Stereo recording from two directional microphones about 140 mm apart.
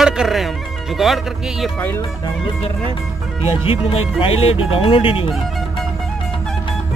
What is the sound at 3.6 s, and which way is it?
Speech, 45° left (ahead or behind).